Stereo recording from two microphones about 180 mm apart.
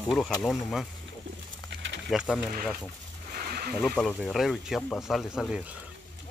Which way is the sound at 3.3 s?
55° right (ahead or behind).